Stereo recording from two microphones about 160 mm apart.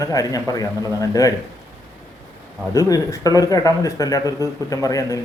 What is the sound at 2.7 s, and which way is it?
A man's voice, 20° left (ahead or behind).